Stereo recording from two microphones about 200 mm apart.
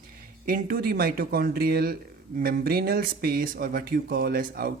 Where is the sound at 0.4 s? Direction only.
45° right (ahead or behind).